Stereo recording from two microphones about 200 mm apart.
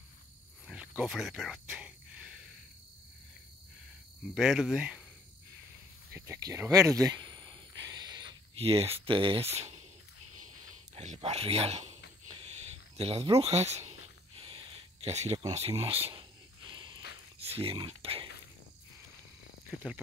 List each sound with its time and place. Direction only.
0.7 s a sound: 5° right (ahead or behind)
4.4 s speech: 5° right (ahead or behind)
6.1 s speech: 15° right (ahead or behind); by 9.8 s 30° right (ahead or behind)
11.0 s speech: 35° right (ahead or behind)
12.4 s a sound: 30° right (ahead or behind)
15.0 s speech: 30° right (ahead or behind)
15.7 s speech: 15° right (ahead or behind)
16.7 s a sound: 20° right (ahead or behind)
17.6 s speech: 25° right (ahead or behind)
19.7 s speech: 5° right (ahead or behind)